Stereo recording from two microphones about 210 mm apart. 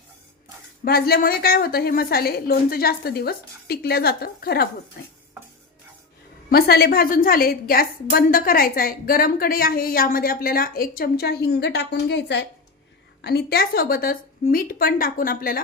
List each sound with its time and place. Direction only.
0.9 s a woman's voice: 45° left (ahead or behind)
6.5 s a woman's voice: 50° left (ahead or behind)